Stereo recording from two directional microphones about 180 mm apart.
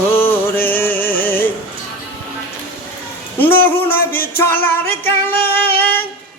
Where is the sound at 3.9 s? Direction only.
55° left (ahead or behind).